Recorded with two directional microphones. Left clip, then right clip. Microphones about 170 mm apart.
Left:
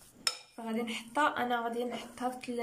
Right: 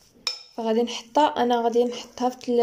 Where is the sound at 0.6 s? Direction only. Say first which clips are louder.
Right 13 dB; 35° right (ahead or behind).